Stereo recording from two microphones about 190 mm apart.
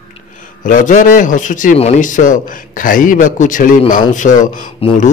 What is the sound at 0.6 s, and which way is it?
A man's voice, 45° left (ahead or behind).